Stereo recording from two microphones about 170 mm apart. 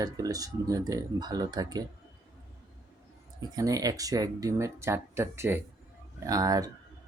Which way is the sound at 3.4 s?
20° right (ahead or behind).